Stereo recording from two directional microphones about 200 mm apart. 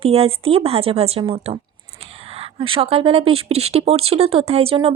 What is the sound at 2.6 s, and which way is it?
A woman's voice, 25° right (ahead or behind).